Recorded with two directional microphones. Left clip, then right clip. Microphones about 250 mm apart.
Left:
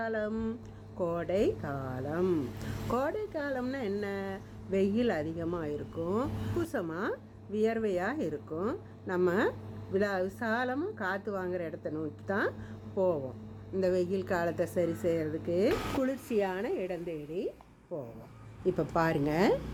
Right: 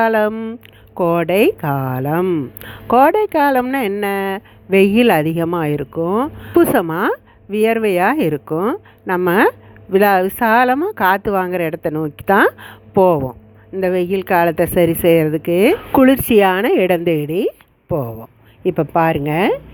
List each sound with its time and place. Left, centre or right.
0.0 s a woman's voice: right
18.6 s speech: right